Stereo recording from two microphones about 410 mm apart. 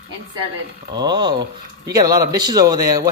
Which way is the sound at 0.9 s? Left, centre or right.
Centre.